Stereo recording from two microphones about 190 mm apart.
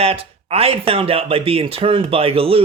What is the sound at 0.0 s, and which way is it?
Speech, 30° right (ahead or behind).